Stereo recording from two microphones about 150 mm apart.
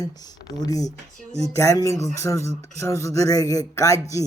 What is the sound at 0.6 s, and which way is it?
Speech, 25° left (ahead or behind).